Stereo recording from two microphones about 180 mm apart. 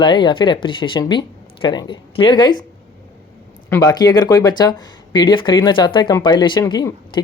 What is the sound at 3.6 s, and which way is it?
Speech, 20° left (ahead or behind).